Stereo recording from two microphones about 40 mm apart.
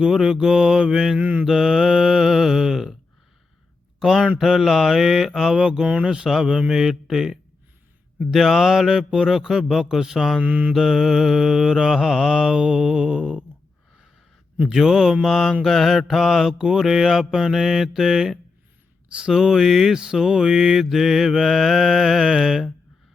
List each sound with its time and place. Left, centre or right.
0.0 s mantra: centre
1.2 s mantra: right
1.5 s mantra: centre
4.0 s mantra: centre
5.5 s speech: right
6.2 s mantra: centre
10.4 s mantra: right
10.7 s mantra: centre
14.7 s mantra: centre
16.5 s mantra: centre
19.0 s a sound: right
19.3 s mantra: centre